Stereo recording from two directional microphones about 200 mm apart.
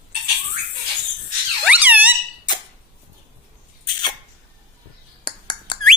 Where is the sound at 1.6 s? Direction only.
10° right (ahead or behind).